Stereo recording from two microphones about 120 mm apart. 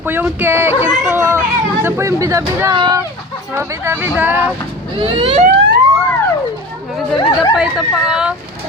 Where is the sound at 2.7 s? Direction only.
40° right (ahead or behind).